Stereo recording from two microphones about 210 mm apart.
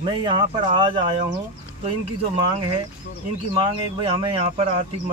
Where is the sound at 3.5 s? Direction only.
25° right (ahead or behind).